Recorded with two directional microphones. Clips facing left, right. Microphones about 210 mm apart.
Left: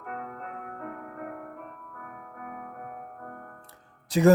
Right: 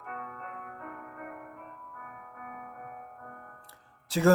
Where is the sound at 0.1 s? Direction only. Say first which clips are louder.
Left 4 dB; 40° left (ahead or behind).